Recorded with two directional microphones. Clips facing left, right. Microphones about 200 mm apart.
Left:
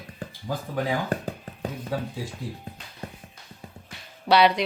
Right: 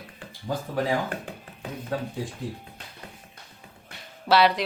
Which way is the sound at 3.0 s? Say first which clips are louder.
Left 8 dB; 40° left (ahead or behind).